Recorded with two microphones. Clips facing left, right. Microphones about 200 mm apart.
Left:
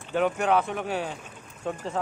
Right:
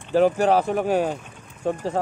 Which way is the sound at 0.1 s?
35° right (ahead or behind).